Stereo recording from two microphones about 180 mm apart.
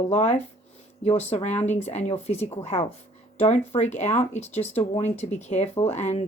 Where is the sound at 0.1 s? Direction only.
40° left (ahead or behind).